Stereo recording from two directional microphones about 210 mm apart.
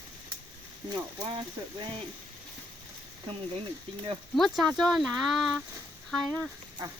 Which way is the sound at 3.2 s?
25° right (ahead or behind).